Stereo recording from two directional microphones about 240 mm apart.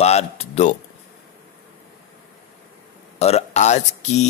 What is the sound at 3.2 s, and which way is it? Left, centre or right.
Speech, left.